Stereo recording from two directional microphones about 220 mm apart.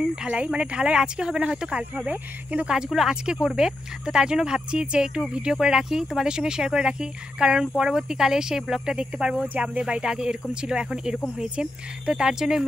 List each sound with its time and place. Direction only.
0.1 s speech: 5° right (ahead or behind)